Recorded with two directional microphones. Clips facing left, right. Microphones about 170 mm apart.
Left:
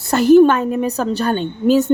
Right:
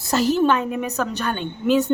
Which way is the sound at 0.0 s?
55° left (ahead or behind).